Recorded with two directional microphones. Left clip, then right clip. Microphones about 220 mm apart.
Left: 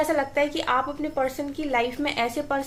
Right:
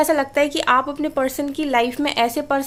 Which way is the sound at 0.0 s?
50° right (ahead or behind).